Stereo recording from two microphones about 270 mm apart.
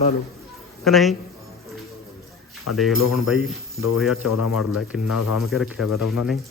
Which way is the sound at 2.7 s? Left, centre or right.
Left.